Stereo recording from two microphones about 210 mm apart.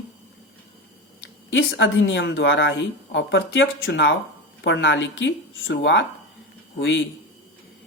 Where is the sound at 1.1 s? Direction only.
65° left (ahead or behind).